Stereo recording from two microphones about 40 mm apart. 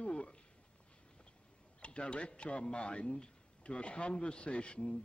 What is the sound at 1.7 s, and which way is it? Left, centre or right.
A man's voice, left.